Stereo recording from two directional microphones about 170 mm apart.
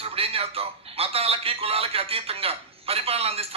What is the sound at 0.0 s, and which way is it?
A man's voice, 35° right (ahead or behind).